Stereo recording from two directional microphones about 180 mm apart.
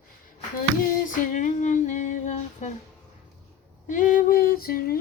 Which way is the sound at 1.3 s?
40° left (ahead or behind).